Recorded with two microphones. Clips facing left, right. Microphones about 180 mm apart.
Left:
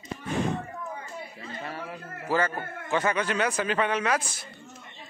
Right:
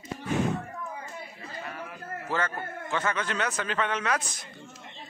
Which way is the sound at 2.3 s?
10° left (ahead or behind).